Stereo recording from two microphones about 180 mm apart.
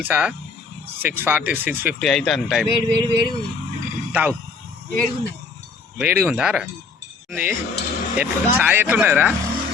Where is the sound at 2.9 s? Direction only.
25° right (ahead or behind).